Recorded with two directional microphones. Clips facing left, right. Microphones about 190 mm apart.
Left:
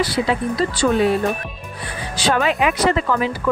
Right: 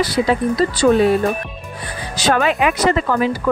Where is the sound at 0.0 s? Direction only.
40° right (ahead or behind).